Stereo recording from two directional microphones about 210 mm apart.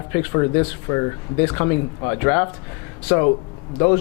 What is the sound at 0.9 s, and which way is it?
Speech, 15° left (ahead or behind).